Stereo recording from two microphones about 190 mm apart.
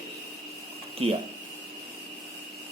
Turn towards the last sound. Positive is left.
turn(degrees=-30)  # may be behind; listen again after turning